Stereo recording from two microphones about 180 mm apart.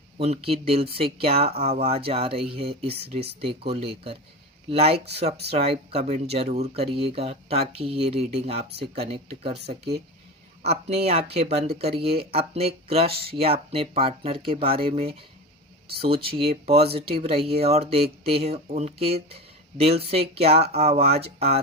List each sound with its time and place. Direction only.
0.2 s speech: 35° right (ahead or behind)
10.6 s speech: 35° right (ahead or behind)